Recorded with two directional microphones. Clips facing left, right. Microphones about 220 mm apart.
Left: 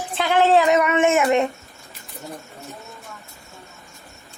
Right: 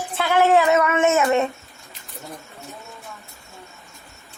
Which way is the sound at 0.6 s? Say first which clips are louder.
Left 1 dB; 15° left (ahead or behind).